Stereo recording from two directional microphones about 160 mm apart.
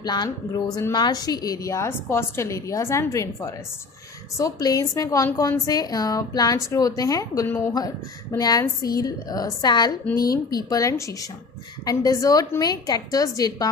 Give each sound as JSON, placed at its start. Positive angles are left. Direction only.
{"t": 0.0, "sound": "a woman's voice", "side_deg": 25}